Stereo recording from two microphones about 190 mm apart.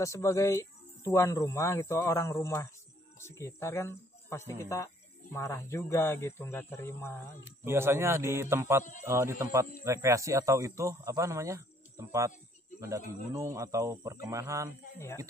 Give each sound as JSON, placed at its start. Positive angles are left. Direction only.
{"t": 0.0, "sound": "speech", "side_deg": 15}
{"t": 7.6, "sound": "a man's voice", "side_deg": -10}